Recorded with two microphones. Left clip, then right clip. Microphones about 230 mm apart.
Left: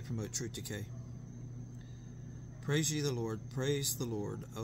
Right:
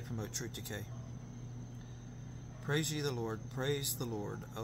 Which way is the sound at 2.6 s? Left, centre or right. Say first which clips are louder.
Left 1 dB; left.